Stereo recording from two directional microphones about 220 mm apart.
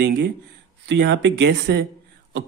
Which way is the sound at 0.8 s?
55° right (ahead or behind).